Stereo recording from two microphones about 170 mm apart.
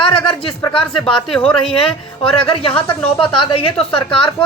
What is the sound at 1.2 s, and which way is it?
Speech, 5° left (ahead or behind).